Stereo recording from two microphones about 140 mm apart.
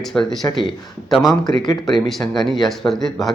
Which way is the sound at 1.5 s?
30° left (ahead or behind).